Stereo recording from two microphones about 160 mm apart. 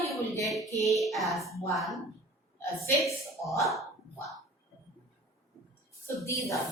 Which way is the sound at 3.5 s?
Centre (ahead or behind).